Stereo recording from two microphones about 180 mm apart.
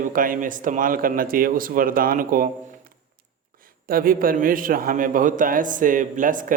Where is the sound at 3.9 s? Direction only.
50° right (ahead or behind).